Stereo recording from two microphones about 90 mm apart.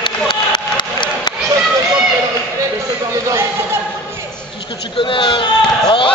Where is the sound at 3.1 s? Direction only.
30° right (ahead or behind).